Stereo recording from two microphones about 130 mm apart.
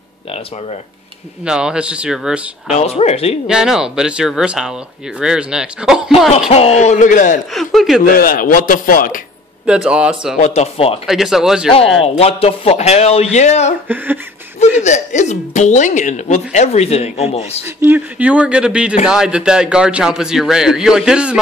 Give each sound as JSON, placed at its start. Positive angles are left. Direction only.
{"t": 1.4, "sound": "speech", "side_deg": -5}
{"t": 2.7, "sound": "speech", "side_deg": 55}
{"t": 3.4, "sound": "a man's voice", "side_deg": -5}
{"t": 6.5, "sound": "speech", "side_deg": 55}
{"t": 7.5, "sound": "a man's voice", "side_deg": 0}
{"t": 8.1, "sound": "a man's voice", "side_deg": 90}
{"t": 9.7, "sound": "speech", "side_deg": -5}
{"t": 10.4, "sound": "speech", "side_deg": 55}
{"t": 11.1, "sound": "a man's voice", "side_deg": -5}
{"t": 12.0, "sound": "speech", "side_deg": 50}
{"t": 13.8, "sound": "speech", "side_deg": -15}
{"t": 14.8, "sound": "speech", "side_deg": 65}
{"t": 17.6, "sound": "a man's voice", "side_deg": -15}